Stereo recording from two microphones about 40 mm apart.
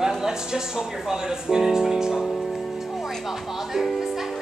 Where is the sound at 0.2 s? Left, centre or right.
Centre.